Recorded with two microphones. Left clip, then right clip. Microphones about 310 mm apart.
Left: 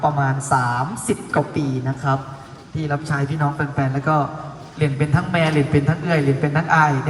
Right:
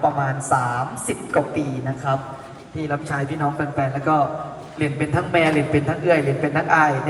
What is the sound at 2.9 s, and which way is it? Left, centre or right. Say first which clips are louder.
A man's voice: left 1 dB; left.